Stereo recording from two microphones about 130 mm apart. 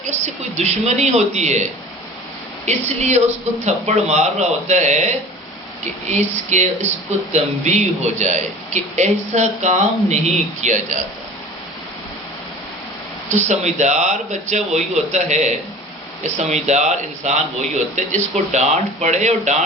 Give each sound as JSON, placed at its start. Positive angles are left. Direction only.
{"t": 0.1, "sound": "a man's voice", "side_deg": -60}
{"t": 2.6, "sound": "a man's voice", "side_deg": -60}
{"t": 13.3, "sound": "a man's voice", "side_deg": -65}